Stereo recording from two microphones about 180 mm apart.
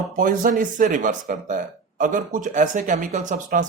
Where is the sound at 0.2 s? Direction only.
50° right (ahead or behind).